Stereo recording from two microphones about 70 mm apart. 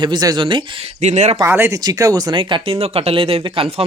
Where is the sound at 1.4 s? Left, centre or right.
Right.